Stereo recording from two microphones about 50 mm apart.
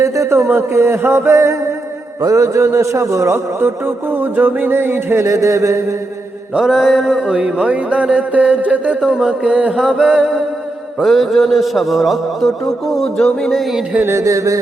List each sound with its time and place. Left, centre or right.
0.0 s a man's voice: right
2.3 s a man's voice: right
3.3 s music: right
5.2 s a man's voice: right
6.6 s mantra: centre
7.3 s speech: centre
9.0 s mantra: centre
9.5 s speech: right
9.7 s mantra: centre
11.0 s a man's voice: centre
14.2 s a man's voice: right